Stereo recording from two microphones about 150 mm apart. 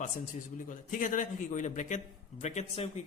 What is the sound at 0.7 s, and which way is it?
A man's voice, 60° left (ahead or behind).